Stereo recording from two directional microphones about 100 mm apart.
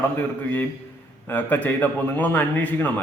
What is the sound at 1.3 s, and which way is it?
A man's voice, 20° left (ahead or behind).